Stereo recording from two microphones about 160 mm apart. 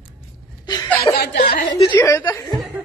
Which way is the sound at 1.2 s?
75° left (ahead or behind).